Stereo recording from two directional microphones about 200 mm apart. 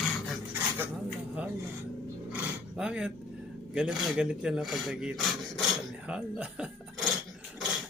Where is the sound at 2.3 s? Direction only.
5° right (ahead or behind).